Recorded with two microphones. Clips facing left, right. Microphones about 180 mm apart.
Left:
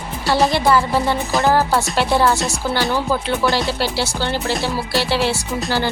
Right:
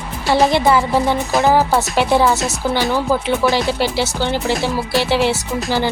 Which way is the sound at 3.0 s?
15° right (ahead or behind).